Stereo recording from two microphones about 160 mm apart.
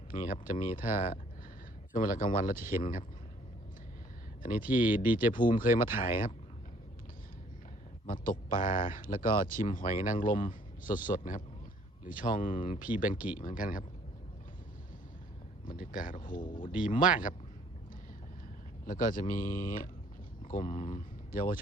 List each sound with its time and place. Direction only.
0.1 s speech: 60° left (ahead or behind)
4.4 s speech: 60° left (ahead or behind)
8.0 s speech: 60° left (ahead or behind)
12.9 s speech: 10° right (ahead or behind)
13.4 s speech: 60° left (ahead or behind)
15.7 s speech: 60° left (ahead or behind)
16.4 s speech: 30° left (ahead or behind)
17.1 s speech: 60° left (ahead or behind)
18.9 s speech: 60° left (ahead or behind)